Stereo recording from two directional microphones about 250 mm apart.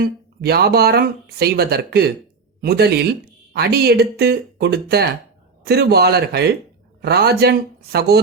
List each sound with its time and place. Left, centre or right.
0.0 s speech: right